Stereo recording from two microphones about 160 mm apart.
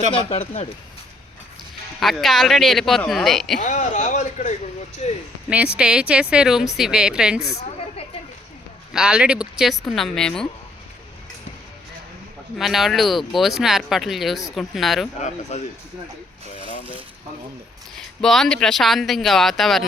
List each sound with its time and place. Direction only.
0.1 s speech: 35° left (ahead or behind)
2.0 s speech: centre (ahead or behind)
3.6 s speech: 50° left (ahead or behind)
5.5 s speech: 5° right (ahead or behind)
8.9 s speech: 5° right (ahead or behind)
12.5 s speech: centre (ahead or behind)
15.2 s speech: 45° left (ahead or behind)
18.2 s speech: 5° left (ahead or behind)